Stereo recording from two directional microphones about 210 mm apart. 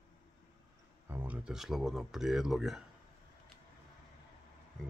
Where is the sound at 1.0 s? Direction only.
10° right (ahead or behind).